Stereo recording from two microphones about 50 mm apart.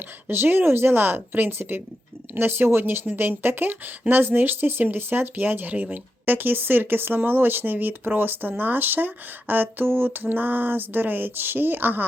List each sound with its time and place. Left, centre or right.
0.3 s speech: right